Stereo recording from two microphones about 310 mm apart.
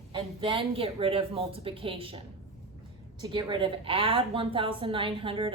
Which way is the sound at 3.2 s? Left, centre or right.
Centre.